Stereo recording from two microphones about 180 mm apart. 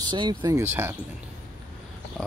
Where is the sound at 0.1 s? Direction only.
25° right (ahead or behind).